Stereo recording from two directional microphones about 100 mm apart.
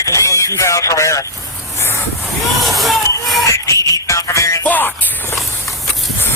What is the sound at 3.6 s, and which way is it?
Music, 30° left (ahead or behind).